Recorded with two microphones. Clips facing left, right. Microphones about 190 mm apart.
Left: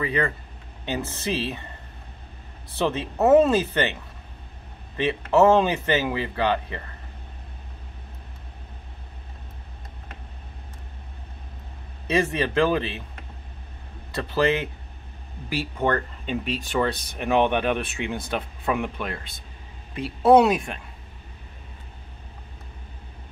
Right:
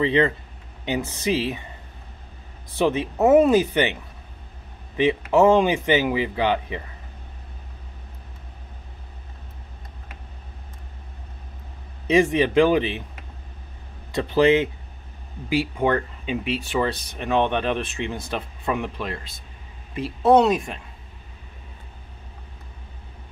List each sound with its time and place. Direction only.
0.0 s speech: 25° right (ahead or behind)
2.7 s speech: 15° right (ahead or behind)
4.9 s speech: 15° right (ahead or behind)
12.1 s speech: 15° right (ahead or behind)
14.1 s speech: 20° right (ahead or behind); by 20.8 s centre (ahead or behind)